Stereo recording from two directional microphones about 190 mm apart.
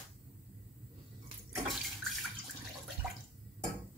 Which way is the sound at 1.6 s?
Centre (ahead or behind).